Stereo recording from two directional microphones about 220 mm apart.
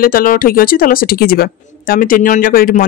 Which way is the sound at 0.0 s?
40° left (ahead or behind).